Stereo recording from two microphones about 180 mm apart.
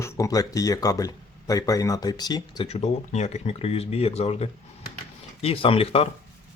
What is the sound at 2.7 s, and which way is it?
Speech, 35° left (ahead or behind).